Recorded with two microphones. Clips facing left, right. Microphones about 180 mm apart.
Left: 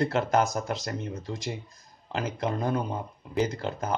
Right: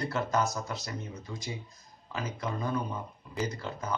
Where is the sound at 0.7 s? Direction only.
90° left.